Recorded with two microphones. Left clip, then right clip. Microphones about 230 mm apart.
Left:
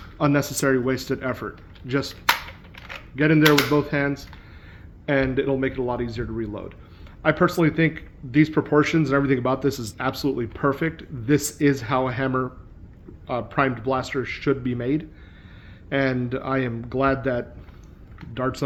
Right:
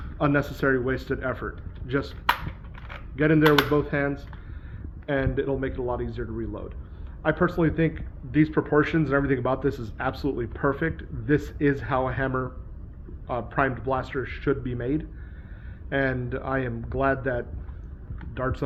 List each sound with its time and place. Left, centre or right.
0.2 s speech: left
3.2 s speech: left